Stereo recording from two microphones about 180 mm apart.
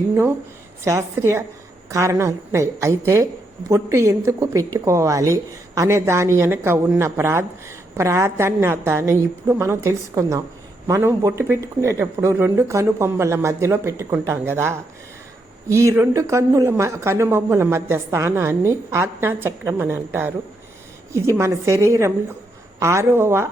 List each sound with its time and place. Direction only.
0.1 s a woman's voice: 15° right (ahead or behind)